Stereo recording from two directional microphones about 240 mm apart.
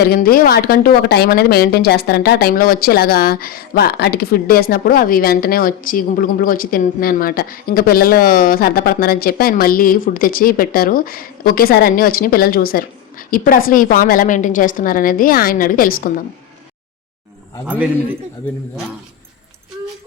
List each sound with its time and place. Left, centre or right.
0.1 s speech: left